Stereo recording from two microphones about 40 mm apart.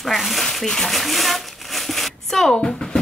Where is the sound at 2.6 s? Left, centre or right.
Centre.